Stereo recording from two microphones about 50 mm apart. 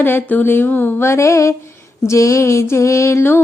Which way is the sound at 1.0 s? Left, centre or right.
Left.